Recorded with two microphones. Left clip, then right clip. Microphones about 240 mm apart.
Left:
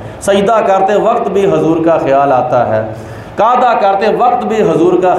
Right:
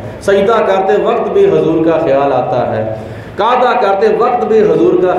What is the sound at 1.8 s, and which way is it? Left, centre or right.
Mantra, left.